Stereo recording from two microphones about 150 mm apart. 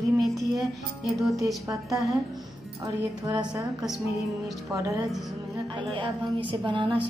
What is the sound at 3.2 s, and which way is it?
Speech, 20° right (ahead or behind).